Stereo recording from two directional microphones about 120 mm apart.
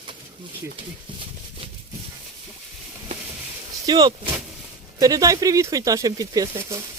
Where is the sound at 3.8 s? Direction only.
35° right (ahead or behind).